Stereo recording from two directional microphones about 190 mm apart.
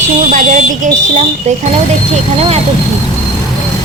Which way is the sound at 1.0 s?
40° right (ahead or behind).